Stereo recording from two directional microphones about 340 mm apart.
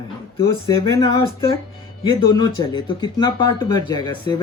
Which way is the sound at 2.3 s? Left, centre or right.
Centre.